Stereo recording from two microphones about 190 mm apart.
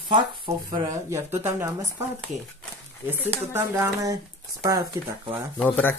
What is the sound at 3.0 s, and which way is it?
Speech, 10° right (ahead or behind).